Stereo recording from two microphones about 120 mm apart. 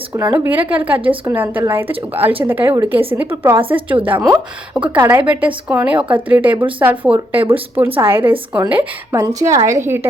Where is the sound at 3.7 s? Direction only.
45° right (ahead or behind).